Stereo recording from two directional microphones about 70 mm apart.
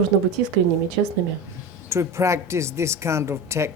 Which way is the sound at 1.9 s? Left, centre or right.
Right.